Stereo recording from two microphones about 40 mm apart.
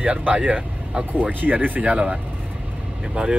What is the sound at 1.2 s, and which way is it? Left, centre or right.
Speech, right.